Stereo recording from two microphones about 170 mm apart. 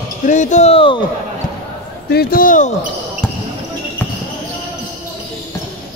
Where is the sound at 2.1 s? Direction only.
55° left (ahead or behind).